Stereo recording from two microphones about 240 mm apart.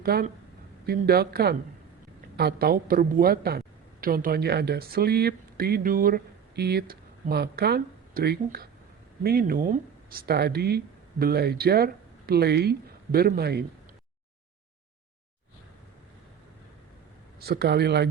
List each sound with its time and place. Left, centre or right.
0.0 s a woman's voice: right
17.4 s speech: right